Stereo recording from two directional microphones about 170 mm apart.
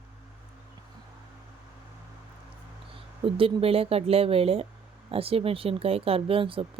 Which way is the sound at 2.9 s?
30° right (ahead or behind).